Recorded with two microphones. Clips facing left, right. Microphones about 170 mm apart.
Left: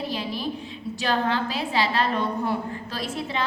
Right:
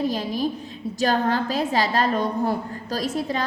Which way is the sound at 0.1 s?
45° right (ahead or behind).